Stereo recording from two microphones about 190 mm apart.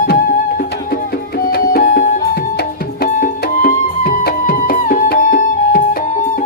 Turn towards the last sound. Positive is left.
turn(degrees=45)  # may be behind; listen again after turning